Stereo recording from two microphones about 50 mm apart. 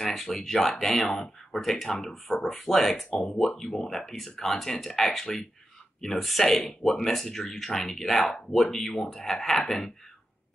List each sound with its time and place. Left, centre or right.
0.0 s a sound: centre
0.3 s speech: centre
3.1 s speech: left
3.4 s speech: centre